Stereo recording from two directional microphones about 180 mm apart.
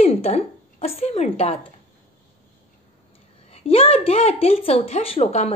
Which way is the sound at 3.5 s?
35° left (ahead or behind).